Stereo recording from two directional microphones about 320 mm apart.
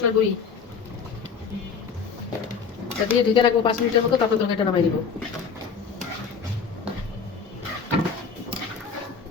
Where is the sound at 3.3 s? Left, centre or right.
Centre.